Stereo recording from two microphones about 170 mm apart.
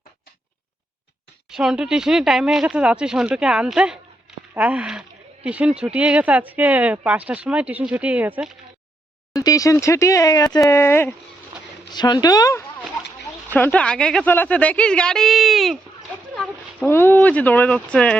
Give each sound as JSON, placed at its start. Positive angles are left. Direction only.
{"t": 1.5, "sound": "speech", "side_deg": -5}
{"t": 9.3, "sound": "speech", "side_deg": 20}
{"t": 11.9, "sound": "speech", "side_deg": 25}
{"t": 16.8, "sound": "speech", "side_deg": 15}